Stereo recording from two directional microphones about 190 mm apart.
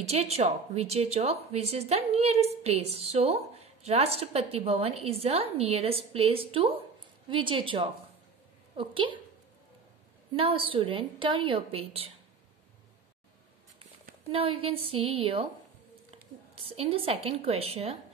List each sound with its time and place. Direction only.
0.0 s a woman's voice: 35° right (ahead or behind)
10.3 s a woman's voice: 30° right (ahead or behind)
14.3 s a woman's voice: 30° right (ahead or behind)
16.5 s speech: 30° right (ahead or behind)